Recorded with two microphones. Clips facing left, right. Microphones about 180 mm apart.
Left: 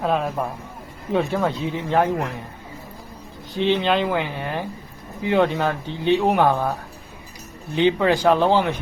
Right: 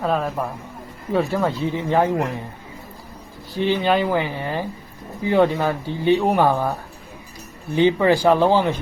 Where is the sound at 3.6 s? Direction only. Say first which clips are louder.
Right 1 dB; 10° right (ahead or behind).